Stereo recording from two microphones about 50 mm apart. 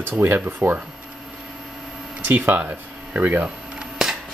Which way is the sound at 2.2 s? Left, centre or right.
Right.